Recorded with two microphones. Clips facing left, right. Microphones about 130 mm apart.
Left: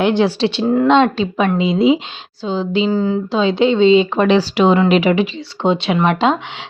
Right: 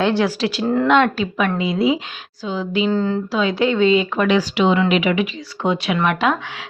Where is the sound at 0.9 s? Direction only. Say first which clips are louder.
Left 2 dB; 25° left (ahead or behind).